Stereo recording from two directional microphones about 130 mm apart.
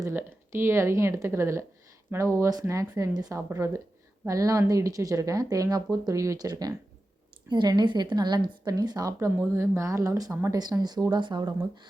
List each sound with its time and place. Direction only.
0.1 s a woman's voice: 15° right (ahead or behind); by 11.9 s 35° right (ahead or behind)